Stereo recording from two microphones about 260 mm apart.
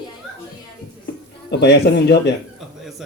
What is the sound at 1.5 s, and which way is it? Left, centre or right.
Speech, left.